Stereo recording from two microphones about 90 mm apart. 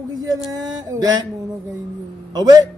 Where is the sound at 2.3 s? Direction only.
45° right (ahead or behind).